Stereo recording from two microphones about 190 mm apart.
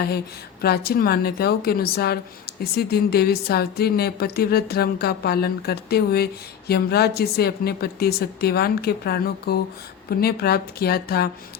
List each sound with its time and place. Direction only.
0.6 s speech: 55° left (ahead or behind)